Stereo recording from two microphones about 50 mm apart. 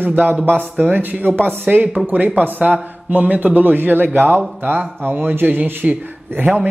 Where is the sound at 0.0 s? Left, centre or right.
Right.